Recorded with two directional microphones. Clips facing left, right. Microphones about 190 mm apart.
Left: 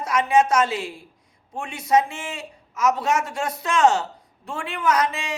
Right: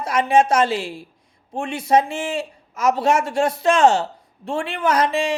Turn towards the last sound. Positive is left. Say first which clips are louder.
# right 4 dB
turn(degrees=-30)  # may be behind; listen again after turning